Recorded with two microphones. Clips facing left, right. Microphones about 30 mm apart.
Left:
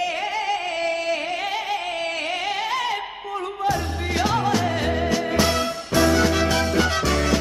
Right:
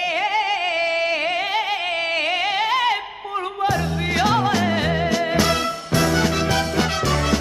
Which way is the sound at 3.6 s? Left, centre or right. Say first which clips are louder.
Right 2 dB; right.